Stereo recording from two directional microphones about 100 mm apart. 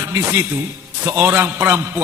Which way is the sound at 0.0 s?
25° right (ahead or behind).